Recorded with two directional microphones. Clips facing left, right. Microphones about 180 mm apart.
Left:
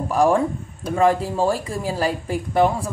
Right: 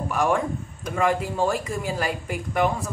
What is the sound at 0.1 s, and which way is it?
Speech, 35° left (ahead or behind).